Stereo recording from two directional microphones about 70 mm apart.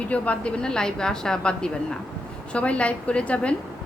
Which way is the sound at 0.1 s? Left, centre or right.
Centre.